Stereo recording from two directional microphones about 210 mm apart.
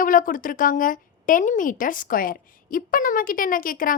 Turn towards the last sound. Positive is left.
turn(degrees=40)  # may be behind; listen again after turning